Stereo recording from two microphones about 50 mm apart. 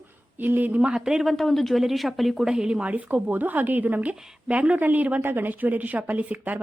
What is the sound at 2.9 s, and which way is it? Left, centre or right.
Speech, right.